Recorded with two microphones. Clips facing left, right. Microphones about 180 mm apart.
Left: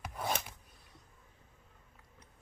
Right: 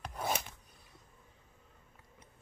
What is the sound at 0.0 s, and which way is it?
Filing, centre (ahead or behind).